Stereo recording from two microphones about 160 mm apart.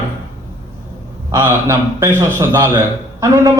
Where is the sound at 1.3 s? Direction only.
15° right (ahead or behind).